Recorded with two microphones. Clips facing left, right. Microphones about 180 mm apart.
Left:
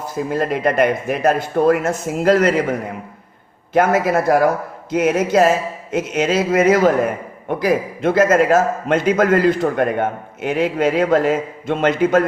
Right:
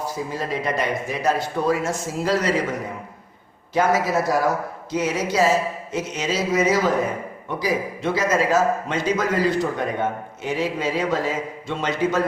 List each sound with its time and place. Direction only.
0.3 s speech: 55° left (ahead or behind)
3.8 s speech: 55° left (ahead or behind)